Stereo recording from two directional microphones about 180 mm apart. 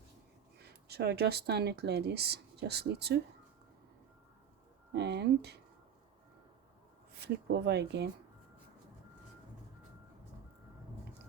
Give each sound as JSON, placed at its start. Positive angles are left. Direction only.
{"t": 0.6, "sound": "speech", "side_deg": -65}
{"t": 4.9, "sound": "speech", "side_deg": -70}
{"t": 7.1, "sound": "speech", "side_deg": -65}